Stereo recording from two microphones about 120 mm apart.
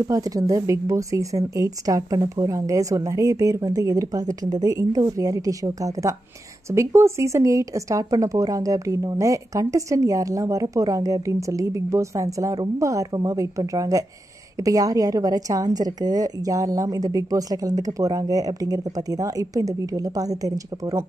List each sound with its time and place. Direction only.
0.1 s a woman's voice: 30° right (ahead or behind)